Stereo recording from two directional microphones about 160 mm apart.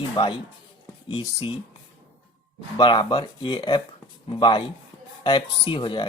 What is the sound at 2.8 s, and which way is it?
Speech, 30° left (ahead or behind).